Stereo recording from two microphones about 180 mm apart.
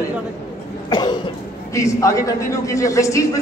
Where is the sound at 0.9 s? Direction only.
25° left (ahead or behind).